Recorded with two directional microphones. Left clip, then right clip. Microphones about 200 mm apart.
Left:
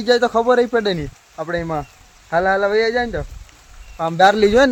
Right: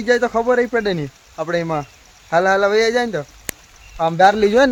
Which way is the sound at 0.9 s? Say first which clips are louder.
Right 2 dB; 10° right (ahead or behind).